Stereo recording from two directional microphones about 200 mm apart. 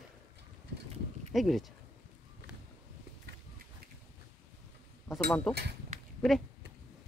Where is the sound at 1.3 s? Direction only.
Centre (ahead or behind).